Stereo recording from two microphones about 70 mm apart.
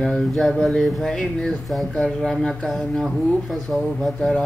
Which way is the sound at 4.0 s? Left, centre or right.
Centre.